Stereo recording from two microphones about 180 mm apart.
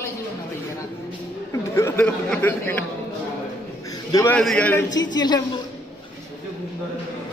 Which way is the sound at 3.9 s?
20° left (ahead or behind).